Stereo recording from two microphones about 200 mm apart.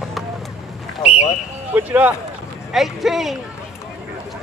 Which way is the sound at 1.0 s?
35° left (ahead or behind).